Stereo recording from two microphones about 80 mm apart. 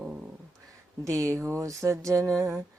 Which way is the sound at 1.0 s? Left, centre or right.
Right.